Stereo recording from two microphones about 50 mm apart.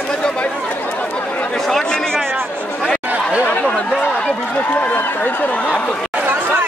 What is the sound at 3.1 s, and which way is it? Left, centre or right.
Chatter, right.